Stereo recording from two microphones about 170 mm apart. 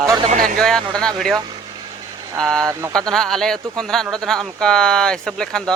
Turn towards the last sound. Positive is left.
turn(degrees=5)  # may be behind; listen again after turning